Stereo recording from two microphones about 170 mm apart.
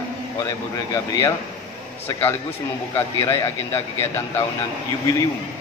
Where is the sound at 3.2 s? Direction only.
15° left (ahead or behind).